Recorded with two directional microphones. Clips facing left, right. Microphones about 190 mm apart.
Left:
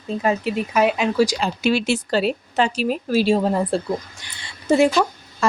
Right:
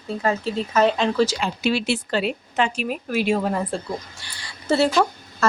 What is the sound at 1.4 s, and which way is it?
A woman's voice, 50° left (ahead or behind).